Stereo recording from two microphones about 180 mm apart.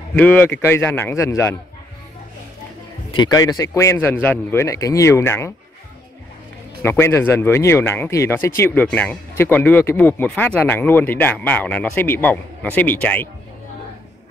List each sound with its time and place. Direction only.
0.1 s speech: 10° left (ahead or behind)
3.2 s speech: 20° left (ahead or behind)
6.8 s speech: 15° left (ahead or behind)